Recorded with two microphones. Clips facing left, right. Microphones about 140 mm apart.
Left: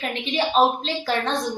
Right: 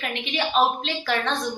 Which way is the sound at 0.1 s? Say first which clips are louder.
Left 3 dB; 30° left (ahead or behind).